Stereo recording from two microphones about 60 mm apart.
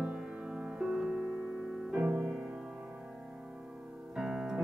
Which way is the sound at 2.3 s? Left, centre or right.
Centre.